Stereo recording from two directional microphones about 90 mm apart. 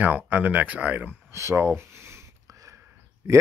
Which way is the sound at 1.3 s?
30° right (ahead or behind).